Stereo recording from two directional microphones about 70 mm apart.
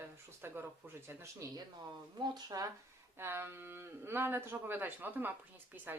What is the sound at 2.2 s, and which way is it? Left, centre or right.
Speech, right.